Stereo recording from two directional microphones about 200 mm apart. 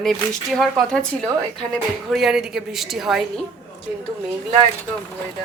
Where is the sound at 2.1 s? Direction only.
Centre (ahead or behind).